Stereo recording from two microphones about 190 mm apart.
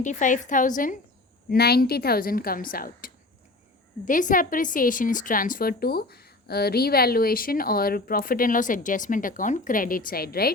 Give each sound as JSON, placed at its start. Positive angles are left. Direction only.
{"t": 0.0, "sound": "a woman's voice", "side_deg": 40}
{"t": 1.5, "sound": "a woman's voice", "side_deg": 55}